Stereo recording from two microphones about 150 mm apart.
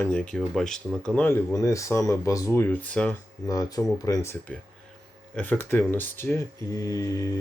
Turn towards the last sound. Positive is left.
turn(degrees=20)  # may be behind; listen again after turning